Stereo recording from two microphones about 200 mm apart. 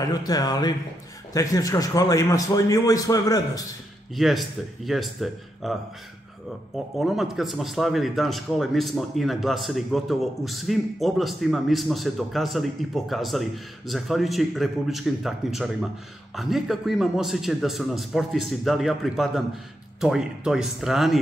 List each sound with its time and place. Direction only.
0.0 s speech: 20° left (ahead or behind)
4.1 s speech: centre (ahead or behind)
7.0 s speech: centre (ahead or behind)